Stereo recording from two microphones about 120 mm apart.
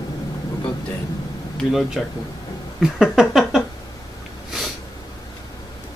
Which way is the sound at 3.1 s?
Centre (ahead or behind).